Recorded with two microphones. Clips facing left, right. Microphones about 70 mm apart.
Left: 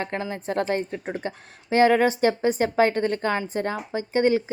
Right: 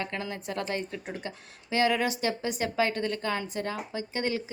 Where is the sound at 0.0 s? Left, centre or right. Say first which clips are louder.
Left 5 dB; left.